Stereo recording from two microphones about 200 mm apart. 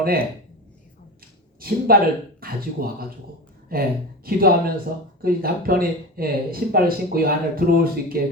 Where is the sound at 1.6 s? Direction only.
45° right (ahead or behind).